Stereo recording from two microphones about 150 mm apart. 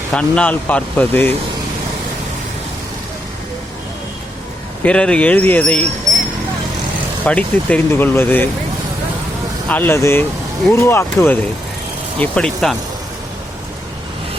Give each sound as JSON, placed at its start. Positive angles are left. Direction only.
{"t": 0.1, "sound": "speech", "side_deg": 10}
{"t": 4.8, "sound": "speech", "side_deg": 5}
{"t": 7.3, "sound": "speech", "side_deg": 10}
{"t": 9.6, "sound": "speech", "side_deg": 10}
{"t": 12.2, "sound": "speech", "side_deg": 5}